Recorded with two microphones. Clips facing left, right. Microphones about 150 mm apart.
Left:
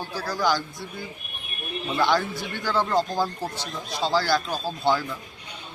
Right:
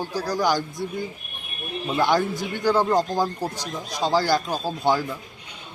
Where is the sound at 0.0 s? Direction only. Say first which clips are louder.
Right 3 dB; 15° right (ahead or behind).